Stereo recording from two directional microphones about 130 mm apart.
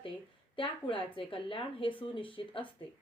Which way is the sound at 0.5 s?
40° left (ahead or behind).